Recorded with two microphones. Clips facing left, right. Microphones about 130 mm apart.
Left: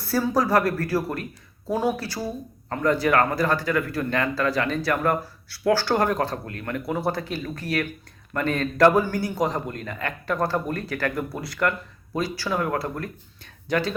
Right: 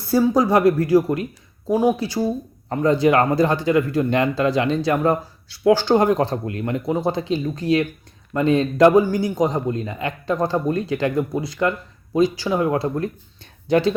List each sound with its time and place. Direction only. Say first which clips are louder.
0.1 s speech: right 5 dB; 20° right (ahead or behind)